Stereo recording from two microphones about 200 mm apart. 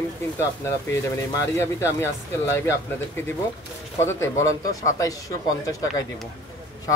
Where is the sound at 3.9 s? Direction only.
15° left (ahead or behind).